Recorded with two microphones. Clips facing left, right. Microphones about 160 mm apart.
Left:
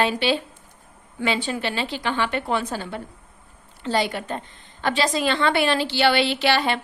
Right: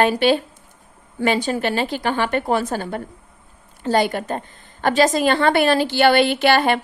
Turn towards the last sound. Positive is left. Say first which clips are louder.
# right 5 dB
turn(degrees=-50)  # may be behind; listen again after turning